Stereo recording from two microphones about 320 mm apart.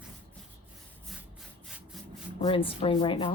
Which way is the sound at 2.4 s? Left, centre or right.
Centre.